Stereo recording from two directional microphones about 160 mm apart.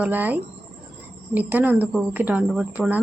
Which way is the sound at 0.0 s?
10° right (ahead or behind).